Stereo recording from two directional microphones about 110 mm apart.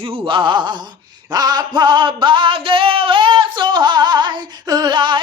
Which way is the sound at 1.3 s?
35° right (ahead or behind).